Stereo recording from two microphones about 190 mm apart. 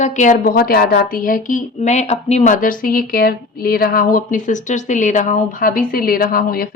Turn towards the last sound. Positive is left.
turn(degrees=50)  # may be behind; listen again after turning